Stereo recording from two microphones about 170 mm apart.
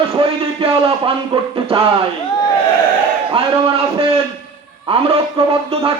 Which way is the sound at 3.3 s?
35° right (ahead or behind).